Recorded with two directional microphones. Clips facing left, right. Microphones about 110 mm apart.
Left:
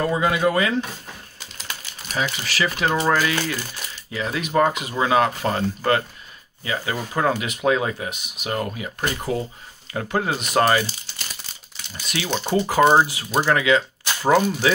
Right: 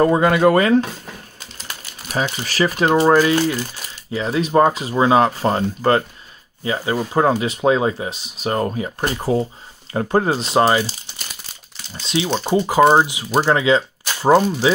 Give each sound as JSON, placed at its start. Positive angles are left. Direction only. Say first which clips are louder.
{"t": 0.0, "sound": "speech", "louder": "right 6 dB", "side_deg": -50}
{"t": 2.2, "sound": "speech", "louder": "right 5 dB", "side_deg": -35}
{"t": 3.2, "sound": "speech", "louder": "right 7 dB", "side_deg": -20}
{"t": 6.6, "sound": "speech", "louder": "right 5 dB", "side_deg": -30}
{"t": 12.0, "sound": "speech", "louder": "right 5 dB", "side_deg": -25}
{"t": 13.4, "sound": "speech", "louder": "right 3 dB", "side_deg": -25}